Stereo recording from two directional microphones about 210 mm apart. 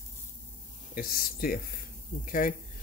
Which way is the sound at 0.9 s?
45° left (ahead or behind).